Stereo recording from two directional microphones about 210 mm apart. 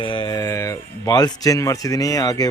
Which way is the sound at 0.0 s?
20° left (ahead or behind).